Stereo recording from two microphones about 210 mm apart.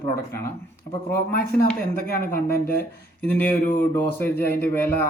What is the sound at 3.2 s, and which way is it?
Speech, 10° left (ahead or behind).